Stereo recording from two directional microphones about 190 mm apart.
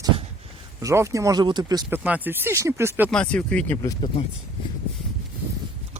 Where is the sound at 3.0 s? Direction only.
5° left (ahead or behind).